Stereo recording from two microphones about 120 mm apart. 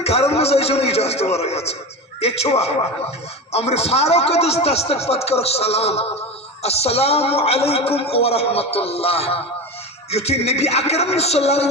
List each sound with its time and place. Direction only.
0.0 s a man's voice: 60° left (ahead or behind)